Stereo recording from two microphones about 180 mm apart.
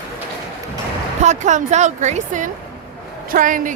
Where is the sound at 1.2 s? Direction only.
40° right (ahead or behind).